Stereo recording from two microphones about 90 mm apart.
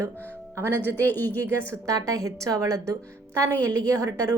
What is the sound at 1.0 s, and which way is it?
Speech, 20° left (ahead or behind).